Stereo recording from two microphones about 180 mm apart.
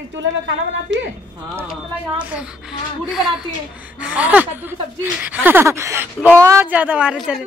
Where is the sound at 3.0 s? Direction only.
Centre (ahead or behind).